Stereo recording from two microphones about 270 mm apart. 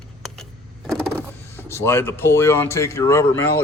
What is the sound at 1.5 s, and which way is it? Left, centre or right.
Speech, centre.